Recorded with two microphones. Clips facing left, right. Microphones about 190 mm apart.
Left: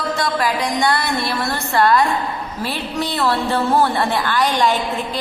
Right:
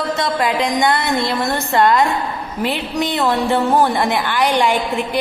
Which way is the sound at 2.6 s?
20° right (ahead or behind).